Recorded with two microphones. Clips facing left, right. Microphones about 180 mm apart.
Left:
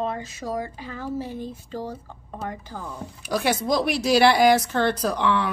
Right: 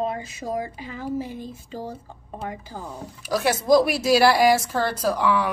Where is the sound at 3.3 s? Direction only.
Centre (ahead or behind).